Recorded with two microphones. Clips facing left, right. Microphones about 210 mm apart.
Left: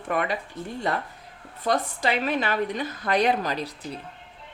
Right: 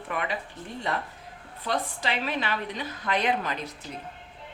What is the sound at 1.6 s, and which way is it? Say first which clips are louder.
A woman's voice: left 5 dB; 45° left (ahead or behind).